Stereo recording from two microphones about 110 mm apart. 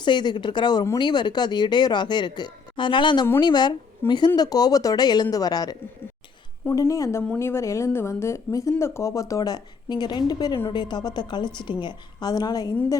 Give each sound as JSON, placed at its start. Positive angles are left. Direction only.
{"t": 0.0, "sound": "a woman's voice", "side_deg": 45}
{"t": 6.7, "sound": "a woman's voice", "side_deg": 30}